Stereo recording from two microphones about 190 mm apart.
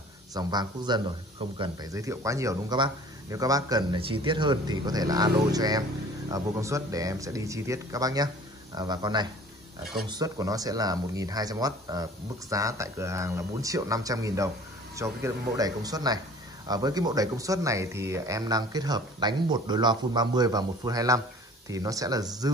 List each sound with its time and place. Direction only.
0.3 s speech: 20° right (ahead or behind)